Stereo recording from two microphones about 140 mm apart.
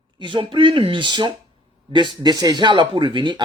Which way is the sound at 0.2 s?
35° right (ahead or behind).